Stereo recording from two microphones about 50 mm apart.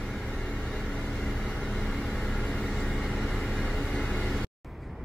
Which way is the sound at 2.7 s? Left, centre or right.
Centre.